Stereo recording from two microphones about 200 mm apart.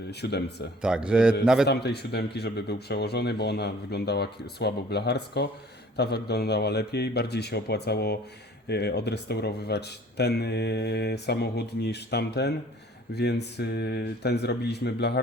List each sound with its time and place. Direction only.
0.1 s speech: 55° left (ahead or behind)
0.8 s a man's voice: 5° right (ahead or behind)
1.6 s speech: 55° left (ahead or behind)